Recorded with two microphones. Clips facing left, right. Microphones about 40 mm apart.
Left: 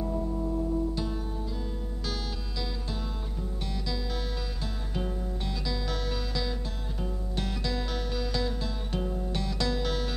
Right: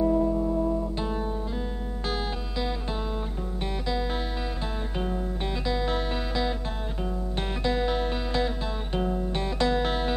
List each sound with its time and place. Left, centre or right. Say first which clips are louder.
0.0 s music: right 8 dB; right
4.9 s music: right 2 dB; right